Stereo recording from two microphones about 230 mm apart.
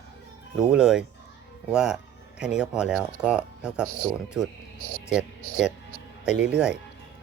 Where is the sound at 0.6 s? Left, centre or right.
Centre.